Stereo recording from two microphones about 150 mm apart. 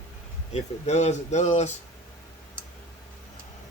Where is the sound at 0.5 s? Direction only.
50° left (ahead or behind).